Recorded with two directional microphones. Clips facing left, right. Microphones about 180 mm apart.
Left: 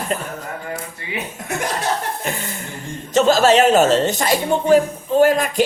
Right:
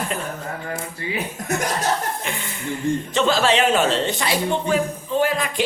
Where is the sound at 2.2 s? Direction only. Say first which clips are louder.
Left 4 dB; 40° left (ahead or behind).